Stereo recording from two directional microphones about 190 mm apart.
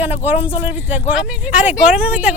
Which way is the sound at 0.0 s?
10° right (ahead or behind).